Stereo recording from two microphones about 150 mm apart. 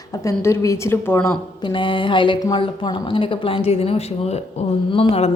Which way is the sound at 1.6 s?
35° left (ahead or behind).